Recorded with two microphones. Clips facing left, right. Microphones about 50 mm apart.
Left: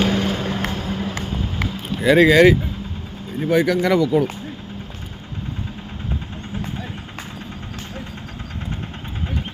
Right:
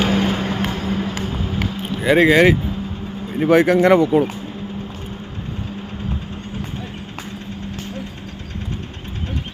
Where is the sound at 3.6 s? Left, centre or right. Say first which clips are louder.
Right 4 dB; right.